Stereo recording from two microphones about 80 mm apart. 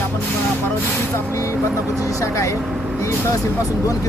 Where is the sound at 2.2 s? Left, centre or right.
Left.